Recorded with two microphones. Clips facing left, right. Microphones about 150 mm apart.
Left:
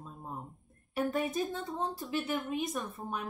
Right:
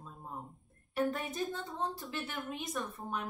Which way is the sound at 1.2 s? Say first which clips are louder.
Left 4 dB; centre (ahead or behind).